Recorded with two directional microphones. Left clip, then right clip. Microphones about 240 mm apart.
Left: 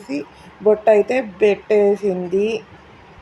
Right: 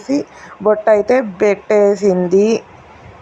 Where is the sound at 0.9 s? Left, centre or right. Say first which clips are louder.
Right 3 dB; centre.